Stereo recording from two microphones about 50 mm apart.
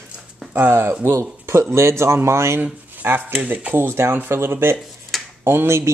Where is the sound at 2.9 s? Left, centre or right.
Right.